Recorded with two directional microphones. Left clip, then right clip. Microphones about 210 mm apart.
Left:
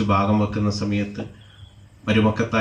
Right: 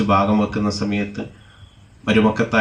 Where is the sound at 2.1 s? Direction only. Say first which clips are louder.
Right 3 dB; 55° right (ahead or behind).